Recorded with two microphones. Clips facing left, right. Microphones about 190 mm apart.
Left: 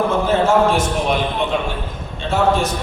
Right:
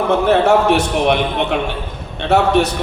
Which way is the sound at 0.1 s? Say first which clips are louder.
Right 3 dB; 70° right (ahead or behind).